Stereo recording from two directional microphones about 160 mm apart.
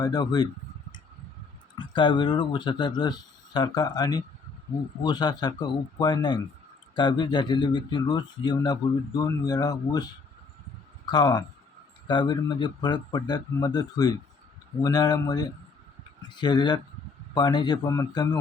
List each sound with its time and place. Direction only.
0.0 s speech: 25° left (ahead or behind)
1.8 s speech: 30° left (ahead or behind)